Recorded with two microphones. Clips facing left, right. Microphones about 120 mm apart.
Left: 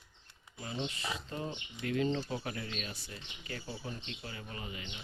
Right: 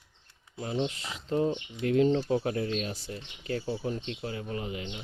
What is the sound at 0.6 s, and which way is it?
Speech, 75° right (ahead or behind).